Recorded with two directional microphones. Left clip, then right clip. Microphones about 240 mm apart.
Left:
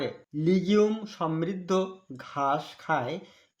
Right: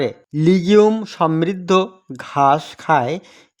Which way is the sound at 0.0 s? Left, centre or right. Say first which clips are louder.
Right 11 dB; right.